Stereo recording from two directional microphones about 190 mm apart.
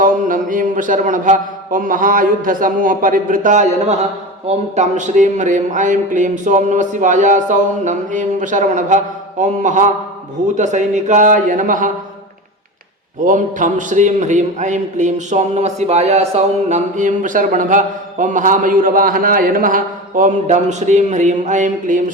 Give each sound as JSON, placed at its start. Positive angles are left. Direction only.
{"t": 0.0, "sound": "a man's voice", "side_deg": -45}
{"t": 13.2, "sound": "a man's voice", "side_deg": -40}